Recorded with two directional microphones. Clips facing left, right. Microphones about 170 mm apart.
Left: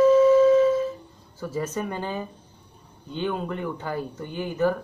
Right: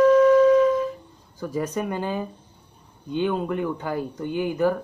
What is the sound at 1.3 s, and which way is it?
Speech, 15° right (ahead or behind).